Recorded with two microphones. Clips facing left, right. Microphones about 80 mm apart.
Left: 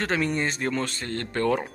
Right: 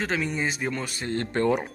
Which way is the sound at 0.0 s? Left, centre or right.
Centre.